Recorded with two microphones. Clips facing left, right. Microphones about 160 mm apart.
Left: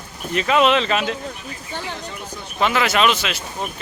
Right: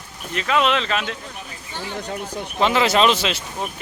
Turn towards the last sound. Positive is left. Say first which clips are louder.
# right 1 dB
turn(degrees=-30)  # may be behind; listen again after turning